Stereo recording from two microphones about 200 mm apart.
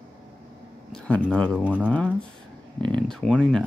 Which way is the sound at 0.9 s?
5° left (ahead or behind).